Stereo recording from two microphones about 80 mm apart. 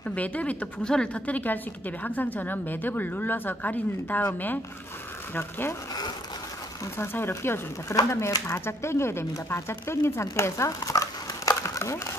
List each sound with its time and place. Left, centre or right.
0.1 s a woman's voice: centre
5.3 s a woman's voice: left
7.0 s a woman's voice: left
7.9 s speech: left
10.2 s dog: left